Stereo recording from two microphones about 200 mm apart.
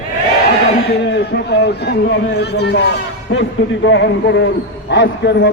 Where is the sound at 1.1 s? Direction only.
60° left (ahead or behind).